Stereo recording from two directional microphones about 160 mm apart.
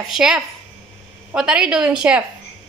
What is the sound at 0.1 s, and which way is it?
A woman's voice, 5° right (ahead or behind).